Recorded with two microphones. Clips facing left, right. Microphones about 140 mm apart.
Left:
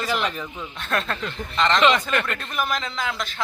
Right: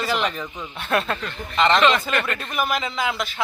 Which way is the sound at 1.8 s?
20° left (ahead or behind).